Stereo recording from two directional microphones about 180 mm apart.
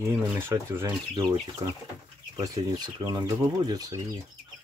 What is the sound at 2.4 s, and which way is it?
Speech, 20° right (ahead or behind).